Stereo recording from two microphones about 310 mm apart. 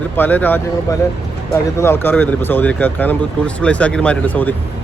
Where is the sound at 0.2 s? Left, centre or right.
Centre.